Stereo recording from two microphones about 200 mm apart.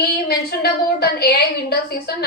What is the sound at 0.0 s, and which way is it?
A woman's voice, 50° left (ahead or behind).